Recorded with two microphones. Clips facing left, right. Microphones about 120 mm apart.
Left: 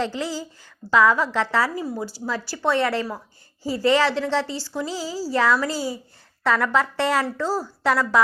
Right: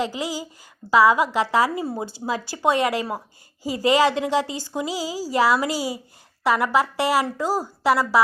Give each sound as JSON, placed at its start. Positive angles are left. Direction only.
{"t": 0.0, "sound": "speech", "side_deg": -10}
{"t": 1.8, "sound": "speech", "side_deg": -25}